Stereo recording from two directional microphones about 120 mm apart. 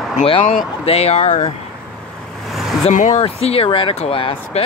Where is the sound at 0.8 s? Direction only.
60° left (ahead or behind).